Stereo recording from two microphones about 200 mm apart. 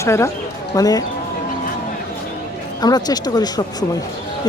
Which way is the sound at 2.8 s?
20° left (ahead or behind).